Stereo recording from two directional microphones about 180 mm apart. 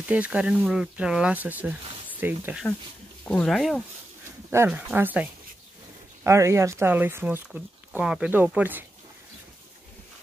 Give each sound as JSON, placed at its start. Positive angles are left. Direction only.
{"t": 0.1, "sound": "speech", "side_deg": -5}
{"t": 3.3, "sound": "speech", "side_deg": 5}
{"t": 4.5, "sound": "speech", "side_deg": -10}